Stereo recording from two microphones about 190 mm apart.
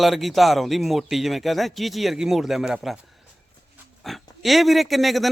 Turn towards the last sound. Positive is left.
turn(degrees=0)  # may be behind; listen again after turning